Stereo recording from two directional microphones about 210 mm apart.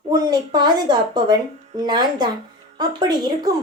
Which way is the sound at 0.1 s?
20° right (ahead or behind).